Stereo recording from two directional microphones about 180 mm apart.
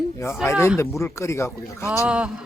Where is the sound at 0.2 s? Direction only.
15° left (ahead or behind).